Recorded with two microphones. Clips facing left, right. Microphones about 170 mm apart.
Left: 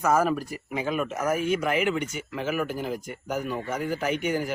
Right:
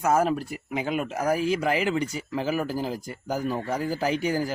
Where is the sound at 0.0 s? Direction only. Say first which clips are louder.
Even; 25° right (ahead or behind).